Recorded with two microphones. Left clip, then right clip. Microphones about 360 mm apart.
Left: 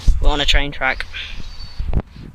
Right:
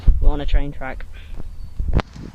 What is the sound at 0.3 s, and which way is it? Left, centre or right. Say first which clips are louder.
Speech: left 11 dB; left.